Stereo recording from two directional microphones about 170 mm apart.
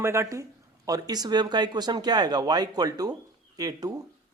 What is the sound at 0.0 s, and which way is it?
A man's voice, 15° right (ahead or behind).